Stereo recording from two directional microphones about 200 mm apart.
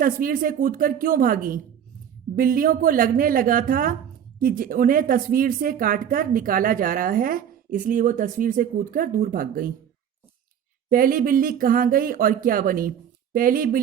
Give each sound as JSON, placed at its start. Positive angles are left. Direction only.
{"t": 0.0, "sound": "speech", "side_deg": -45}
{"t": 10.8, "sound": "speech", "side_deg": -45}